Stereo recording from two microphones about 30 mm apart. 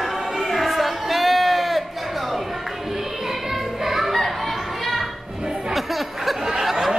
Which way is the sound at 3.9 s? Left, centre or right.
Centre.